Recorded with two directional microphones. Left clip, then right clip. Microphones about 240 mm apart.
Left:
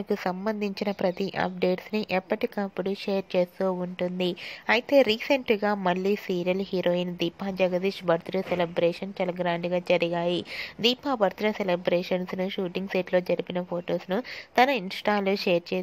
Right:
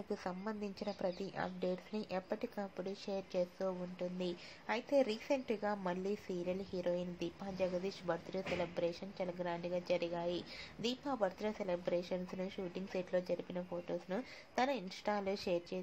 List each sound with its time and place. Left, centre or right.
0.1 s a woman's voice: left